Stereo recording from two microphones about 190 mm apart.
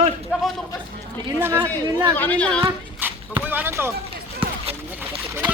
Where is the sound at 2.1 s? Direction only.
10° left (ahead or behind).